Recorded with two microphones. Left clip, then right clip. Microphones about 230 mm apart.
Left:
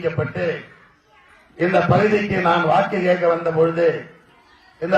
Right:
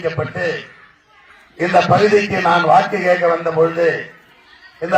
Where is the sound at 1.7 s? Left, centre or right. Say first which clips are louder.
Right 5 dB; right.